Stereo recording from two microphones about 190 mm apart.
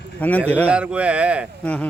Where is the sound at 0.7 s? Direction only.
5° right (ahead or behind).